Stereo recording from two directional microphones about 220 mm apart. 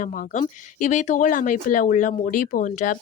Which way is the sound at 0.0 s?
35° left (ahead or behind).